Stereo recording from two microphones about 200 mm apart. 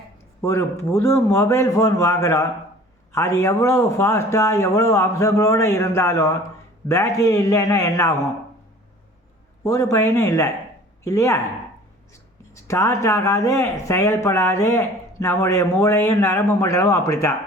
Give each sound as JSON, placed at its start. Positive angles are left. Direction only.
{"t": 0.4, "sound": "speech", "side_deg": 15}
{"t": 9.6, "sound": "speech", "side_deg": 15}
{"t": 12.5, "sound": "speech", "side_deg": 15}